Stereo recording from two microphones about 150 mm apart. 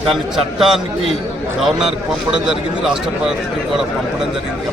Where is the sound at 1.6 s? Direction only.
5° right (ahead or behind).